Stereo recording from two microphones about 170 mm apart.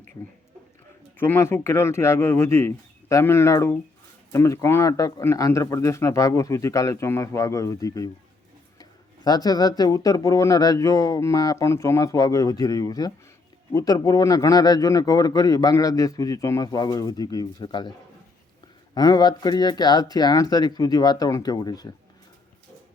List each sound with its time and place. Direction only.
1.2 s speech: 15° left (ahead or behind)
18.9 s speech: 25° left (ahead or behind)